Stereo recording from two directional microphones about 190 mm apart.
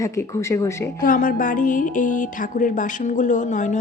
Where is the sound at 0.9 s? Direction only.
45° left (ahead or behind).